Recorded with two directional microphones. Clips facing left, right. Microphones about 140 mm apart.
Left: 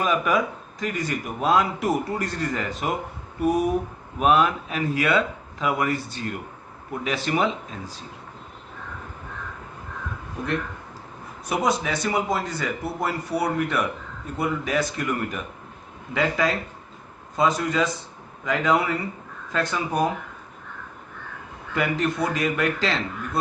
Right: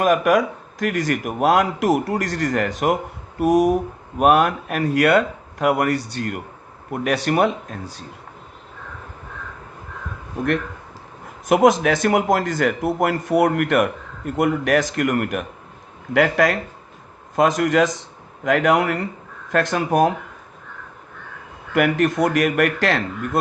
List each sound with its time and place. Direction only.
0.0 s speech: 75° right (ahead or behind)
3.4 s speech: 90° right
4.2 s speech: 60° right (ahead or behind)
11.4 s speech: 90° right
14.6 s speech: 75° right (ahead or behind)
17.6 s speech: 75° right (ahead or behind)
19.5 s speech: 70° right (ahead or behind); by 20.1 s 90° right
21.7 s speech: 65° right (ahead or behind)